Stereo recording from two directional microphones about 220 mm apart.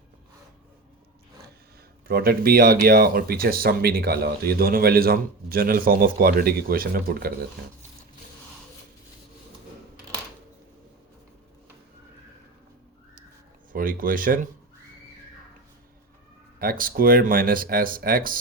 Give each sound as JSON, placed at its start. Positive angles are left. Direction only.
{"t": 2.0, "sound": "speech", "side_deg": -45}
{"t": 13.7, "sound": "speech", "side_deg": -40}
{"t": 16.6, "sound": "speech", "side_deg": -40}